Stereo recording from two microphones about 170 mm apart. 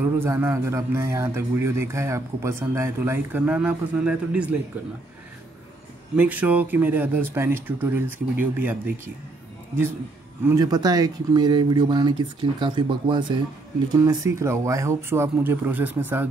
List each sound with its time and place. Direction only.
0.2 s a man's voice: 15° right (ahead or behind)
6.1 s a man's voice: 10° right (ahead or behind)
10.4 s a man's voice: 20° right (ahead or behind)